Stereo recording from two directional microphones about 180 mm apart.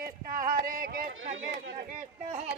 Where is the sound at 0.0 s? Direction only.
50° right (ahead or behind).